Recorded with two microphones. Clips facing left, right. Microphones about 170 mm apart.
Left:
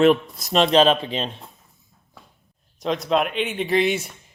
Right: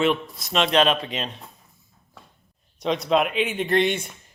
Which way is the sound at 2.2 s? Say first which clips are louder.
Even; centre (ahead or behind).